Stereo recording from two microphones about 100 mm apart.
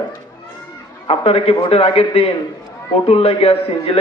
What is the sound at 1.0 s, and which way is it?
A man's voice, 75° left (ahead or behind).